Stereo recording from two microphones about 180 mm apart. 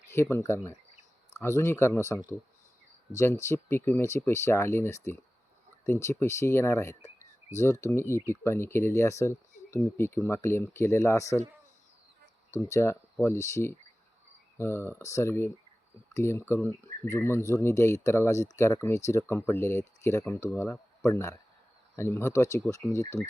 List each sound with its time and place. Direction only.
0.1 s speech: 15° left (ahead or behind)
3.5 s speech: 15° left (ahead or behind)
12.5 s speech: 15° left (ahead or behind)